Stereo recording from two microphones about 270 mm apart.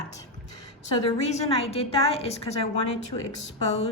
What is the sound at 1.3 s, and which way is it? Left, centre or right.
Speech, left.